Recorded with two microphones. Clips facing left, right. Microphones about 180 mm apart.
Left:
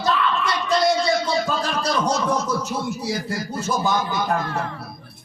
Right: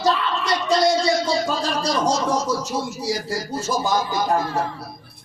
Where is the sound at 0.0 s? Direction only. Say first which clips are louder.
Even; 55° left (ahead or behind).